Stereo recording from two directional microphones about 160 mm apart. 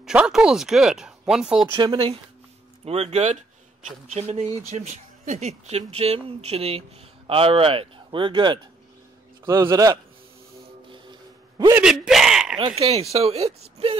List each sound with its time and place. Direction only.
0.0 s speech: 5° right (ahead or behind)
1.7 s speech: 30° right (ahead or behind)
9.5 s a man's voice: 20° right (ahead or behind)
10.9 s a sound: 25° right (ahead or behind)
11.8 s a sound: 5° right (ahead or behind)
12.5 s speech: 35° right (ahead or behind)